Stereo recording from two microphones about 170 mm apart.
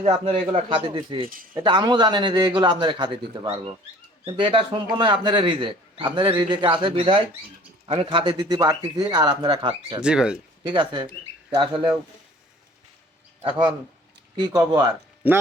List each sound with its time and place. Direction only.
0.0 s a man's voice: 35° right (ahead or behind)
10.0 s speech: 5° right (ahead or behind)
10.7 s a man's voice: 25° right (ahead or behind)
13.4 s a man's voice: 30° right (ahead or behind)